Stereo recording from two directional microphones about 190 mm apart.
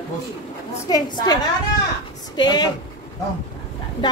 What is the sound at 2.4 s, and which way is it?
Speech, 20° left (ahead or behind).